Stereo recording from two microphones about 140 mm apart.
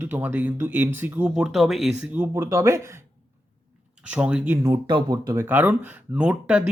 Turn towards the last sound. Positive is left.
turn(degrees=-10)  # may be behind; listen again after turning